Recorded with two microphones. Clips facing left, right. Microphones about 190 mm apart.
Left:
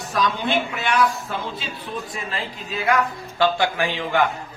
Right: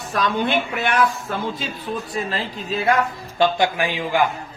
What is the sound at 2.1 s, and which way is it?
Speech, 35° right (ahead or behind).